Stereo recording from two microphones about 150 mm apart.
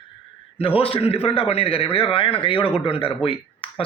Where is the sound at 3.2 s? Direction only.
35° left (ahead or behind).